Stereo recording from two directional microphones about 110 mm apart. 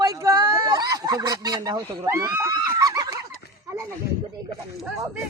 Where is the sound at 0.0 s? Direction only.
30° right (ahead or behind).